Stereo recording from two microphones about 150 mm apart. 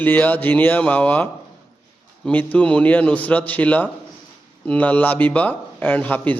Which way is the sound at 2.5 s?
10° left (ahead or behind).